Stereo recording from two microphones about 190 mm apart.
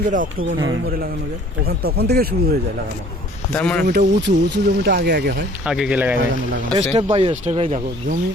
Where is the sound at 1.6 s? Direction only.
55° right (ahead or behind).